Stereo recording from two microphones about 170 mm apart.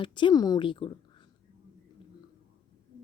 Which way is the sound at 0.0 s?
30° left (ahead or behind).